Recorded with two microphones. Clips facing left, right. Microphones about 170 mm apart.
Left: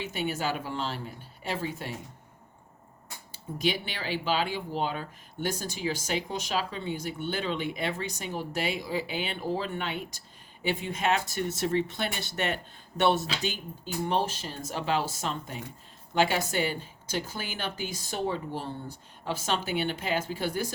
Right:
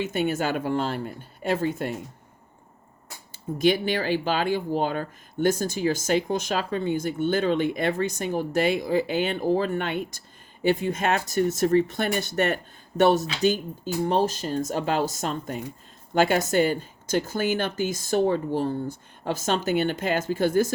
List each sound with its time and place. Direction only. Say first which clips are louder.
0.0 s speech: right 6 dB; 50° right (ahead or behind)
3.3 s speech: right 8 dB; 50° right (ahead or behind)